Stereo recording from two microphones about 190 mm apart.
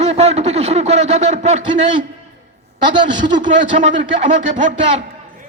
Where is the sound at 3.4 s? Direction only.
40° right (ahead or behind).